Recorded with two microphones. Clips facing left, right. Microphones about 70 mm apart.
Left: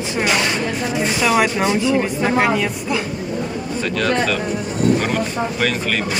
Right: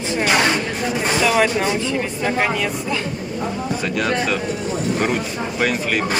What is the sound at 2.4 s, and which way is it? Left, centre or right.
Speech, centre.